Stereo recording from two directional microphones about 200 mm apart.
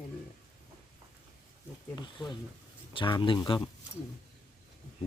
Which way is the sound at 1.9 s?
25° left (ahead or behind).